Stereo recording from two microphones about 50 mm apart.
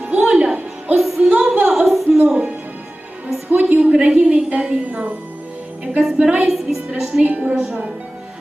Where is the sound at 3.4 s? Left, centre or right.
Right.